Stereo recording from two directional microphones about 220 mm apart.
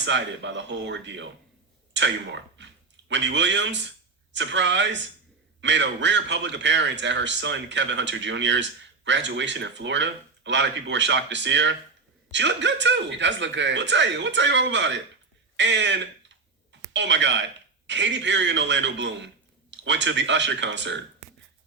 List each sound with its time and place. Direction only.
0.0 s a man's voice: 55° right (ahead or behind)